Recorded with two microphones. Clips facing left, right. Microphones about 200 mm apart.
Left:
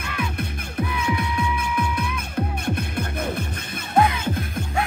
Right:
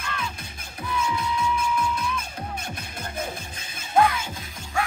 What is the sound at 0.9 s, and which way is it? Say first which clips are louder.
Music: right 3 dB; 60° left (ahead or behind).